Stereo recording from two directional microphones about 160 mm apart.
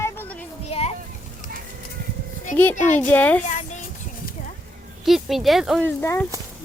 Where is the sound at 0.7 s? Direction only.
40° left (ahead or behind).